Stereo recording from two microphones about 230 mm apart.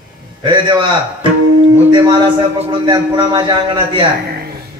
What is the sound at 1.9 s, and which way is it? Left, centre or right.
A man's voice, centre.